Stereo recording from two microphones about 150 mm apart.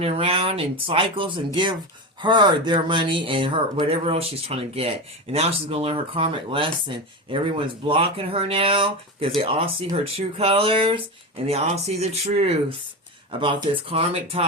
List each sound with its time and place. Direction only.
0.0 s speech: 40° right (ahead or behind)